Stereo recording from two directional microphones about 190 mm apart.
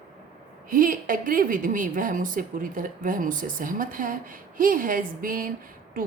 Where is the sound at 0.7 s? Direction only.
45° right (ahead or behind).